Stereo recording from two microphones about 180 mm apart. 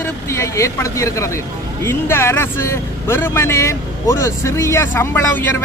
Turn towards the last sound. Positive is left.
turn(degrees=15)  # may be behind; listen again after turning